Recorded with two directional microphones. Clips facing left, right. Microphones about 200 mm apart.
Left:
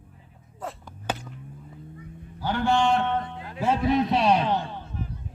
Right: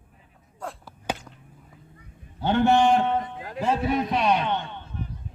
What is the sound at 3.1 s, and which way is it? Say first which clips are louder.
Music: right 1 dB; 10° right (ahead or behind).